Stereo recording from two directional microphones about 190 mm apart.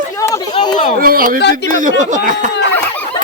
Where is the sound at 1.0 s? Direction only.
50° right (ahead or behind).